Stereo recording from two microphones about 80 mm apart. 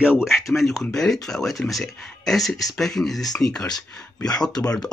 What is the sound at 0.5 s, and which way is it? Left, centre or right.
Speech, centre.